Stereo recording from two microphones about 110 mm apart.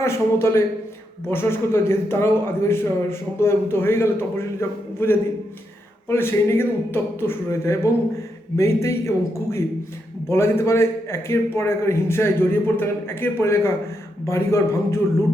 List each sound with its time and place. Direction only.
0.0 s a man's voice: 25° left (ahead or behind)